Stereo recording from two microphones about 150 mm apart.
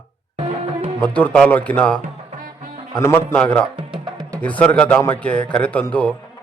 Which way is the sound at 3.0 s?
10° left (ahead or behind).